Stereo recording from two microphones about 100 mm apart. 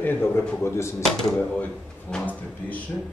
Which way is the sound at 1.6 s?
10° left (ahead or behind).